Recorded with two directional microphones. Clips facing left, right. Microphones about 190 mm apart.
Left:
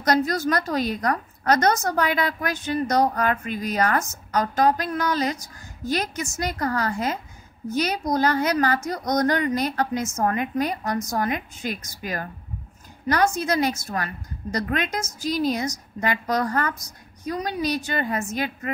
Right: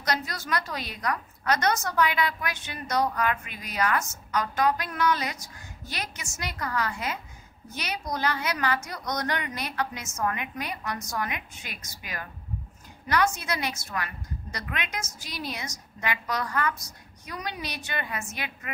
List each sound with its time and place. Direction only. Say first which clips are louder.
0.0 s a woman's voice: left 10 dB; 45° left (ahead or behind)